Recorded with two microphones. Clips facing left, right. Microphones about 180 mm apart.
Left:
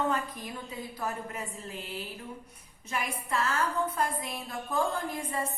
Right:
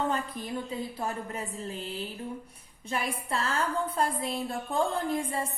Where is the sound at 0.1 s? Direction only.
30° right (ahead or behind).